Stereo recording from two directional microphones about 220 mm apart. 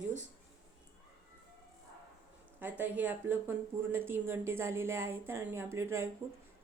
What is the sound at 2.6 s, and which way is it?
Speech, 10° right (ahead or behind).